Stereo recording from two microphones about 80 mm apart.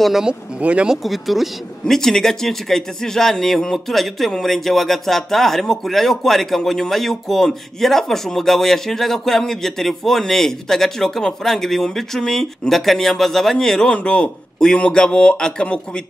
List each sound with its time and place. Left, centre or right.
0.0 s speech: centre
1.0 s speech: centre